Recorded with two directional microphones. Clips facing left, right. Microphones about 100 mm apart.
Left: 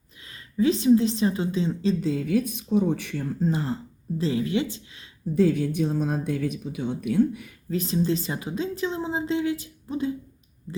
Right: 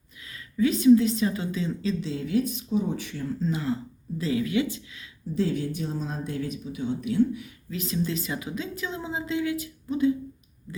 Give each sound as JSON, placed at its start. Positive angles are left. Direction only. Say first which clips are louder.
{"t": 0.3, "sound": "a woman's voice", "louder": "left 2 dB", "side_deg": 30}
{"t": 2.0, "sound": "speech", "louder": "left 2 dB", "side_deg": 55}
{"t": 3.5, "sound": "a woman's voice", "louder": "even", "side_deg": 35}
{"t": 5.3, "sound": "speech", "louder": "left 5 dB", "side_deg": 55}
{"t": 7.7, "sound": "speech", "louder": "left 5 dB", "side_deg": 35}